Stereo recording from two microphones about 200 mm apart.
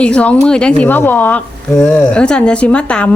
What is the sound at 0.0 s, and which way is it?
A woman's voice, 5° left (ahead or behind).